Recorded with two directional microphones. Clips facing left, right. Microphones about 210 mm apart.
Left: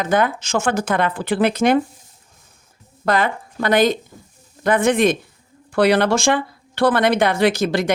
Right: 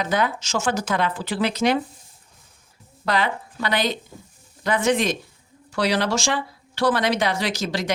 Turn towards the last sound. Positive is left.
turn(degrees=55)  # may be behind; listen again after turning